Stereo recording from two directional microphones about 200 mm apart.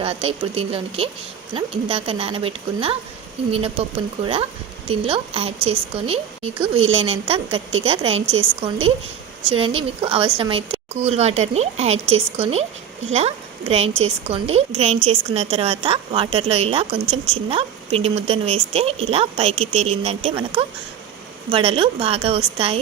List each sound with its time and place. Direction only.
0.0 s a woman's voice: 30° right (ahead or behind)